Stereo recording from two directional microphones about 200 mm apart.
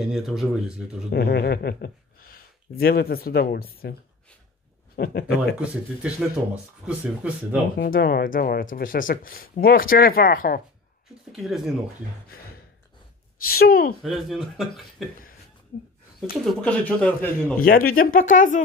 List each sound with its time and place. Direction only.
0.0 s speech: centre (ahead or behind)
1.1 s speech: 55° left (ahead or behind)
4.9 s speech: 50° left (ahead or behind)
5.6 s speech: 5° right (ahead or behind)
7.7 s speech: 50° left (ahead or behind)
11.3 s speech: centre (ahead or behind)
13.5 s speech: 50° left (ahead or behind)
14.0 s speech: centre (ahead or behind)
16.3 s speech: 5° left (ahead or behind)
17.6 s speech: 45° left (ahead or behind)